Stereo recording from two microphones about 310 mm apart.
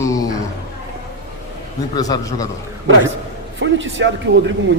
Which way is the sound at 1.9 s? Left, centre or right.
Centre.